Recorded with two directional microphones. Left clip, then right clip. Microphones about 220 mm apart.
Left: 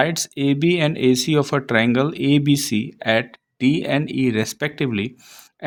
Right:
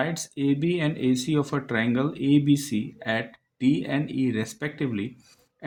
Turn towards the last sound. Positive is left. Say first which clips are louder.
# left 7 dB
turn(degrees=40)  # may be behind; listen again after turning